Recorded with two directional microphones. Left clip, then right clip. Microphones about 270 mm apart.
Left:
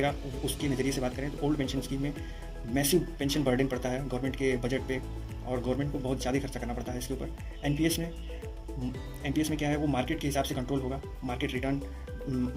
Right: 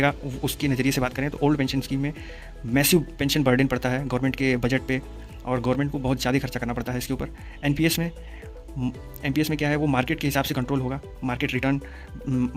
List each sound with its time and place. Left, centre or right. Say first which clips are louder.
0.0 s a man's voice: right 7 dB; right
9.2 s a man's voice: right 6 dB; right